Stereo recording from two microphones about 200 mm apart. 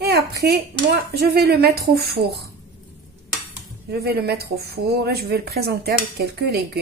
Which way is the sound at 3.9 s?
55° right (ahead or behind).